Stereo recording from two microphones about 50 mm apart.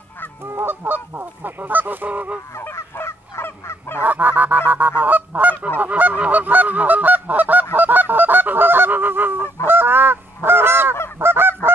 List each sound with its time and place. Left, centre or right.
0.4 s goose: right
2.7 s honk: left
4.0 s goose: right
5.8 s honk: right
7.7 s goose: right
9.7 s honk: right